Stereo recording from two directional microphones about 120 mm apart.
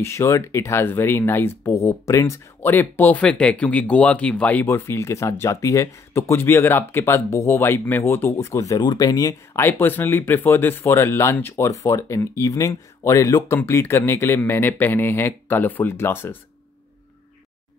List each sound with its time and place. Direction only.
0.0 s speech: 20° left (ahead or behind)